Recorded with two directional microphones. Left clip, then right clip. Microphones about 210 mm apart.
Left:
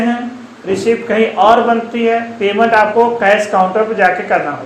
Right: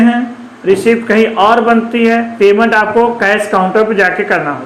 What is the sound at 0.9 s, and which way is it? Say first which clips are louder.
Speech: left 1 dB; 40° right (ahead or behind).